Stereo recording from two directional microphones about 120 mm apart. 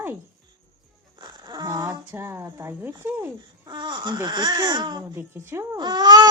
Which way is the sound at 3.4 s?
40° right (ahead or behind).